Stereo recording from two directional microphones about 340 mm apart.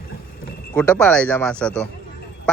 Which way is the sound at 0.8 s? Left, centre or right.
Centre.